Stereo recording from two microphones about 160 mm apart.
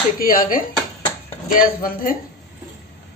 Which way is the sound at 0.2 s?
65° left (ahead or behind).